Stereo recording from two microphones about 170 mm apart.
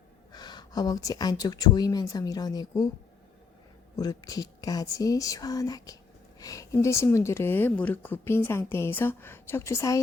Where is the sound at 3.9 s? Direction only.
20° left (ahead or behind).